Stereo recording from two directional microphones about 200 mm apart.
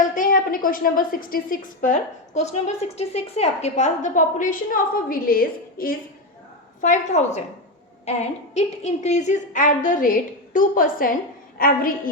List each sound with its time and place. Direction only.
0.1 s a woman's voice: 45° left (ahead or behind)